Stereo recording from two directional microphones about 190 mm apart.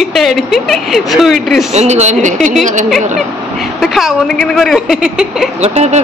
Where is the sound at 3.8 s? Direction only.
Centre (ahead or behind).